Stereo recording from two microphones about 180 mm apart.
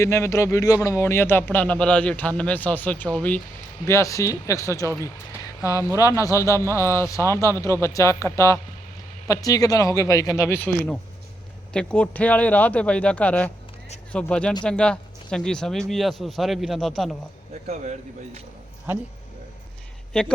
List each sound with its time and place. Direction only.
0.0 s a man's voice: 15° left (ahead or behind)
20.1 s speech: 5° left (ahead or behind)